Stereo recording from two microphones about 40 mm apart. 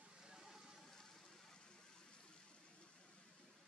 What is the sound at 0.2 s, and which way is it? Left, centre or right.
Vehicle, centre.